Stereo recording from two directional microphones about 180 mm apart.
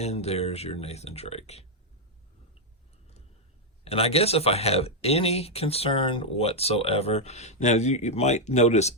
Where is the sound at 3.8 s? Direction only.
35° left (ahead or behind).